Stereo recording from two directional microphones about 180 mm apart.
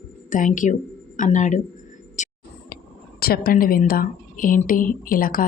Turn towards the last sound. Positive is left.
turn(degrees=50)  # may be behind; listen again after turning